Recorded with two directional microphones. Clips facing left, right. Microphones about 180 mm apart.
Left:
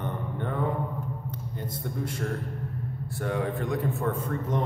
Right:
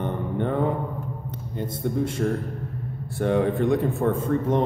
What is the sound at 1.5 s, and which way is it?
Speech, 25° right (ahead or behind).